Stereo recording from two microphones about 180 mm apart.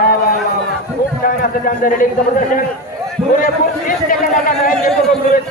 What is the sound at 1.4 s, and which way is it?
A man's voice, 50° left (ahead or behind).